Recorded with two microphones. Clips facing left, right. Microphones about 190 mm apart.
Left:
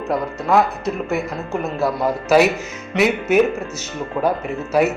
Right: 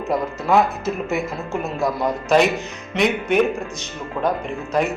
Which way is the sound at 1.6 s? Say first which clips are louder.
Left 2 dB; centre (ahead or behind).